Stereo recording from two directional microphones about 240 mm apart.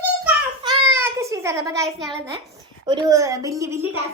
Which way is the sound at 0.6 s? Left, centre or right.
Centre.